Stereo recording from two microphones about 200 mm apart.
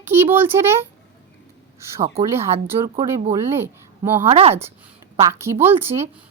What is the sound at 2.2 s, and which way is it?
Speech, 15° right (ahead or behind).